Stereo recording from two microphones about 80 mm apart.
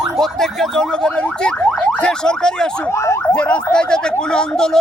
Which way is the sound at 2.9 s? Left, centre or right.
Left.